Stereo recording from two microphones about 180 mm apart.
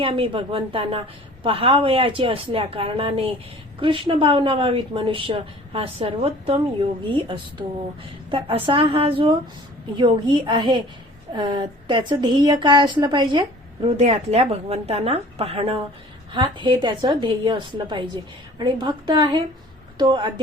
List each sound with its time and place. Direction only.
0.0 s a woman's voice: 30° right (ahead or behind)